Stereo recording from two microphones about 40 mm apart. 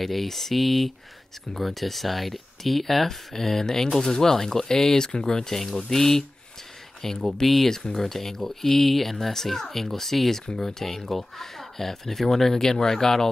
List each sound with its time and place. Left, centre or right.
0.0 s speech: centre